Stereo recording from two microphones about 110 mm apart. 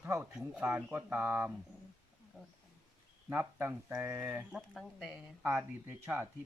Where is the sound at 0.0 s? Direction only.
20° right (ahead or behind).